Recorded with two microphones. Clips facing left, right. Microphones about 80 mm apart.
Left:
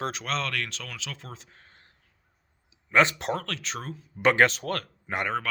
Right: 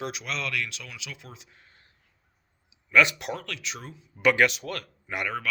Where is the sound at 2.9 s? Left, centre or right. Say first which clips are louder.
Even; left.